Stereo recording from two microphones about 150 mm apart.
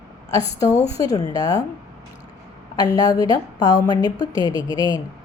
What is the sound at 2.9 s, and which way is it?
A woman's voice, 25° left (ahead or behind).